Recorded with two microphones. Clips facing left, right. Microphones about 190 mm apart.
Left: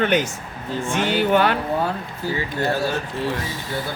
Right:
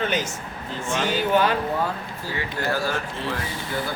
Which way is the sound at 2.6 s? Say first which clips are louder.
Left 3 dB; 20° left (ahead or behind).